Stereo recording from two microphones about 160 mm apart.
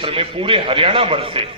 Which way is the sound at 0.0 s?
35° right (ahead or behind).